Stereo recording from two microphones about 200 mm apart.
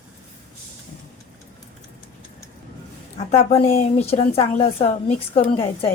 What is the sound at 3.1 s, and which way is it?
A woman's voice, 35° left (ahead or behind).